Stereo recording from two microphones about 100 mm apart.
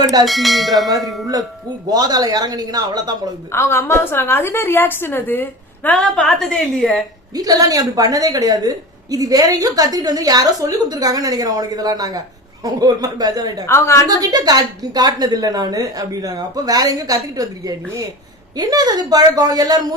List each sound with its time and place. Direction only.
0.0 s a woman's voice: 40° right (ahead or behind)
0.3 s bell: centre (ahead or behind)
1.9 s a woman's voice: 40° right (ahead or behind)
3.5 s a woman's voice: 25° left (ahead or behind); by 7.0 s 5° left (ahead or behind)
7.3 s a woman's voice: 40° right (ahead or behind)
13.7 s a woman's voice: 25° left (ahead or behind)
14.1 s a woman's voice: 40° right (ahead or behind)